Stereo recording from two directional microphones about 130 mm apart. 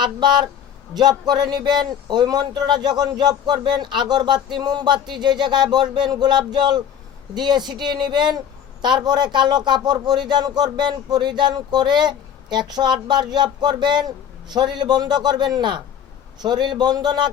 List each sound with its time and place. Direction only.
0.0 s a man's voice: 35° right (ahead or behind)